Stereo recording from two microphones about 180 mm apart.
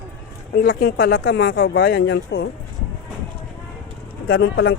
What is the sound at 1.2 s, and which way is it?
Speech, 90° left.